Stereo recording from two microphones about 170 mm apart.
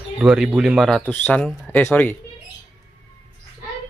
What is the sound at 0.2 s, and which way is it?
Speech, 5° right (ahead or behind).